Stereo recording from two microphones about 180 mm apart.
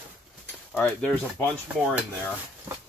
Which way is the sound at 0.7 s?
10° left (ahead or behind).